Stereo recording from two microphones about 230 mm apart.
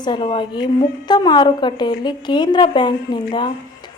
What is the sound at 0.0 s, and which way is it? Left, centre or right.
A woman's voice, centre.